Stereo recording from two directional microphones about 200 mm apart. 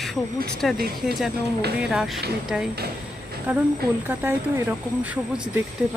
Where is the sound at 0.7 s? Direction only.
50° right (ahead or behind).